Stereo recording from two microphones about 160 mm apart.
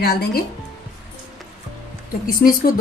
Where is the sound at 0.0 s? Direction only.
75° left (ahead or behind).